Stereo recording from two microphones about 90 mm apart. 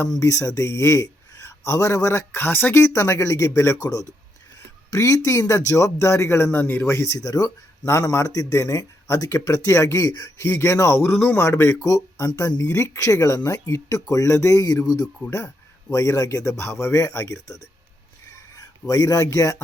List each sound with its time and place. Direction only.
0.1 s speech: 40° left (ahead or behind)
7.9 s a man's voice: 30° left (ahead or behind)
11.4 s speech: 30° left (ahead or behind)
18.9 s speech: 40° left (ahead or behind)